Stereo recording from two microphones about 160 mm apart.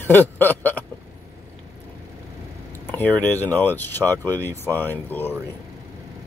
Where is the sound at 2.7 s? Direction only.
10° left (ahead or behind).